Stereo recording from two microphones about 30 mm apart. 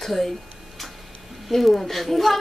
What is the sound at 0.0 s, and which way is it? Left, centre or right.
Speech, centre.